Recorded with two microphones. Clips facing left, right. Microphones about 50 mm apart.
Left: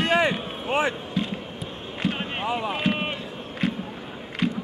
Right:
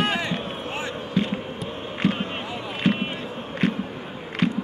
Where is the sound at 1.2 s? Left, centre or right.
Centre.